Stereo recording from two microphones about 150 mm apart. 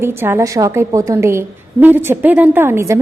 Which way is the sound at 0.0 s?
15° right (ahead or behind).